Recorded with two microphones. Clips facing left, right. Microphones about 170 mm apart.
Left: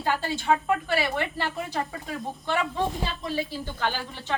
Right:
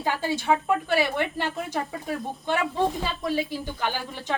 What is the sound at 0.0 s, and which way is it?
A woman's voice, 15° right (ahead or behind).